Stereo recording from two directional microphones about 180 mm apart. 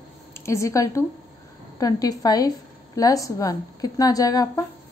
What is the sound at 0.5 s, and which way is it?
A woman's voice, 15° left (ahead or behind).